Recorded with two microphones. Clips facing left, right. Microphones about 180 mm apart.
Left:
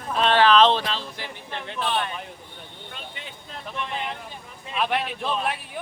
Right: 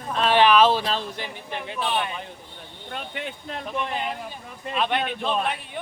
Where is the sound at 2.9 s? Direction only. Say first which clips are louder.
Right 10 dB; 65° right (ahead or behind).